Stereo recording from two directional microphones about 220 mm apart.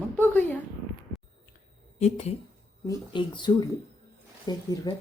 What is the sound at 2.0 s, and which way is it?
A woman's voice, 30° left (ahead or behind).